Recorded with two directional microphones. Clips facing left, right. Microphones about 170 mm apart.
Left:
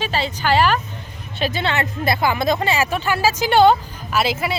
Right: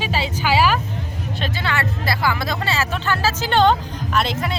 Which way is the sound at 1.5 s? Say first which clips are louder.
Even; 20° left (ahead or behind).